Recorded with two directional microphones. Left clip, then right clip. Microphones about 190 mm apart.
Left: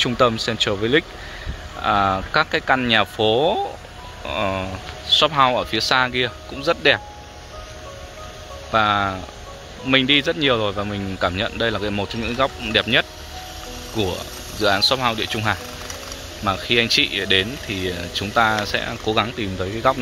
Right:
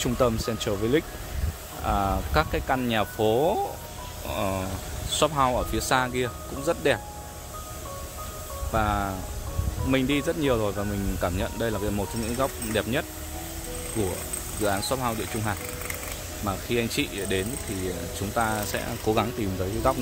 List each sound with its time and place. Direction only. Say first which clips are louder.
0.0 s speech: left 7 dB; 5° right (ahead or behind)
8.7 s speech: left 8 dB; centre (ahead or behind)
14.6 s speech: left 9 dB; centre (ahead or behind)